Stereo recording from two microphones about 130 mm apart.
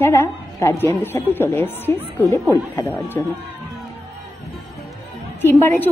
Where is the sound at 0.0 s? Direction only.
20° left (ahead or behind).